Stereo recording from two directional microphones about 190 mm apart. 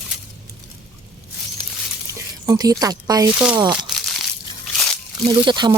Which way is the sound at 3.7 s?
Centre (ahead or behind).